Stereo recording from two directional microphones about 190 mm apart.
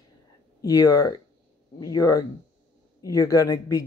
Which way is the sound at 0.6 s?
20° left (ahead or behind).